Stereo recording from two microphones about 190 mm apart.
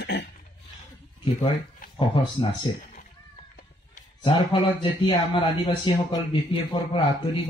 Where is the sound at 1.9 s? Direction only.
25° left (ahead or behind).